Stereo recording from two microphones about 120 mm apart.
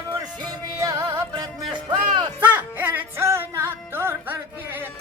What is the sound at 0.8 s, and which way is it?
Music, 25° right (ahead or behind).